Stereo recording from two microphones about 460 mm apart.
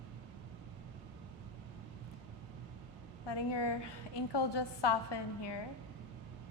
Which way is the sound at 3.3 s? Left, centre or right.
Left.